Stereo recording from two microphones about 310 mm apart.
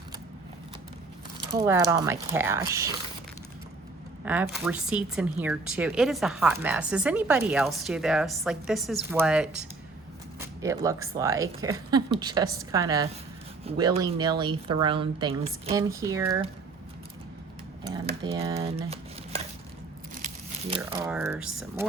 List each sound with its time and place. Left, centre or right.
1.6 s speech: centre
4.3 s speech: centre
10.6 s speech: centre
17.8 s speech: centre
20.2 s crumpling: centre
21.1 s speech: centre